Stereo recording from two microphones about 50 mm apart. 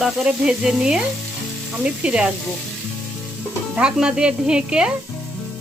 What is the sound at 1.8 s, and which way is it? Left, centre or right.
Speech, right.